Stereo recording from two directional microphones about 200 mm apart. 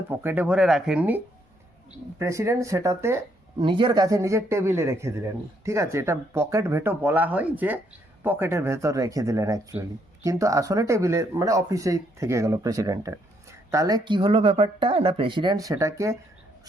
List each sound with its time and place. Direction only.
0.1 s speech: 10° right (ahead or behind)
3.6 s speech: 25° right (ahead or behind)